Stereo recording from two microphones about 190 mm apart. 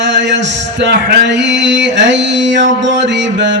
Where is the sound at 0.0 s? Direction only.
65° right (ahead or behind).